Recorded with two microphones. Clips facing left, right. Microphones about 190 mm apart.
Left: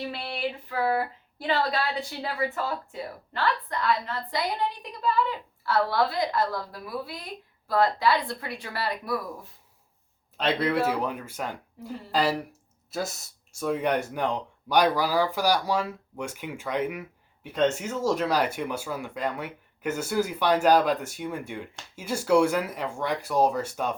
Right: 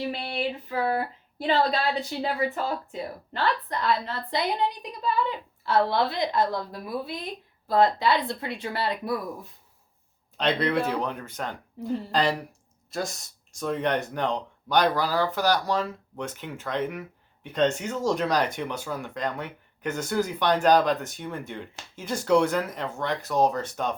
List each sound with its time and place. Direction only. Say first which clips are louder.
0.1 s speech: right 2 dB; 20° right (ahead or behind)
10.3 s speech: right 1 dB; 5° left (ahead or behind)